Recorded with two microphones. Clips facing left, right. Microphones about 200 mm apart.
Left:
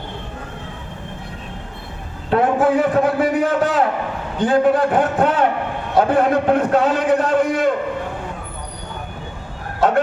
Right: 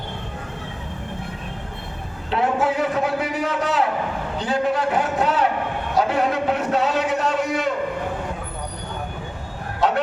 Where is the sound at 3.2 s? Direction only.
50° left (ahead or behind).